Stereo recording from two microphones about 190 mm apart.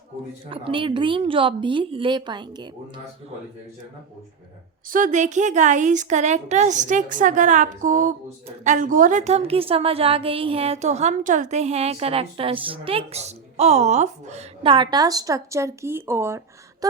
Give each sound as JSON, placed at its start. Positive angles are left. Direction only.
{"t": 0.5, "sound": "a woman's voice", "side_deg": -25}
{"t": 4.9, "sound": "a woman's voice", "side_deg": -45}